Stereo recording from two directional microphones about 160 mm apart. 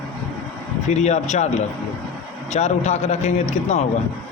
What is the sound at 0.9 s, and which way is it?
Speech, 45° left (ahead or behind).